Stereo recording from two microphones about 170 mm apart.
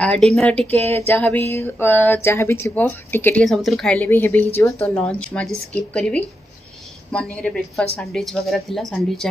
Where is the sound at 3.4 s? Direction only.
Centre (ahead or behind).